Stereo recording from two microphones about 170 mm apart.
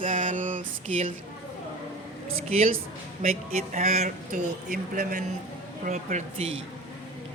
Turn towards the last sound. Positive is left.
turn(degrees=-35)  # may be behind; listen again after turning